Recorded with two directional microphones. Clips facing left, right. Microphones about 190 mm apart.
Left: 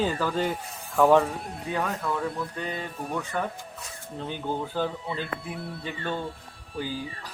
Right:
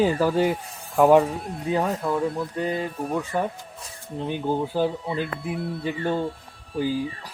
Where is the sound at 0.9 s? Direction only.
20° right (ahead or behind).